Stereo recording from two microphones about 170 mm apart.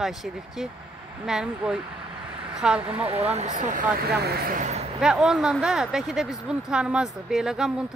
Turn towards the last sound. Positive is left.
turn(degrees=-5)  # may be behind; listen again after turning